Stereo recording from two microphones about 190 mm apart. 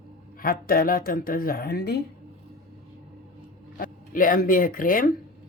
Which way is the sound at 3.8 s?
45° left (ahead or behind).